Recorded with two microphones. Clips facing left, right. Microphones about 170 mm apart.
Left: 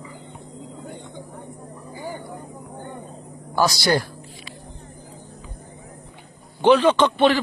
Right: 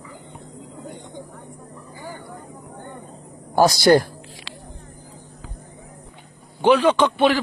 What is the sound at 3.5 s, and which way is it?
Speech, 50° right (ahead or behind).